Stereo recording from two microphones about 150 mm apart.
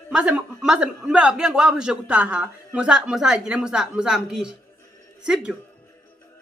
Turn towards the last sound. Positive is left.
turn(degrees=-5)  # may be behind; listen again after turning